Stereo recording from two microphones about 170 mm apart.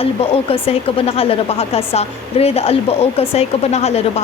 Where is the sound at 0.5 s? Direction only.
35° left (ahead or behind).